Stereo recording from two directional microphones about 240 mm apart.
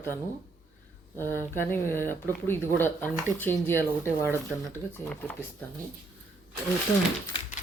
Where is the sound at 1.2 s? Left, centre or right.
Centre.